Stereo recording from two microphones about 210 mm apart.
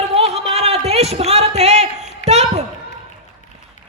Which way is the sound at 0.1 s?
30° right (ahead or behind).